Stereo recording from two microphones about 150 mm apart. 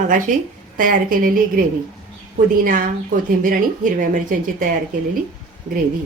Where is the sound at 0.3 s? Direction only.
60° right (ahead or behind).